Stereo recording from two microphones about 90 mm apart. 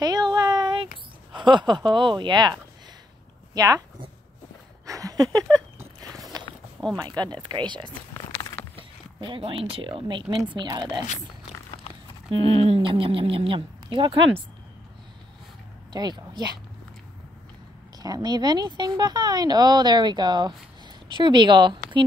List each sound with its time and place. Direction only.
0.0 s a sound: 50° right (ahead or behind)
1.3 s speech: 60° right (ahead or behind)
3.5 s speech: 40° right (ahead or behind)
4.8 s a sound: 40° right (ahead or behind)
6.0 s biting: centre (ahead or behind)
6.8 s speech: 10° left (ahead or behind)
7.3 s speech: 60° right (ahead or behind)
8.7 s speech: 80° right
10.5 s speech: 55° right (ahead or behind)
12.3 s speech: 90° right; by 14.3 s 65° right (ahead or behind)
15.9 s speech: 50° right (ahead or behind)
17.9 s speech: 45° right (ahead or behind)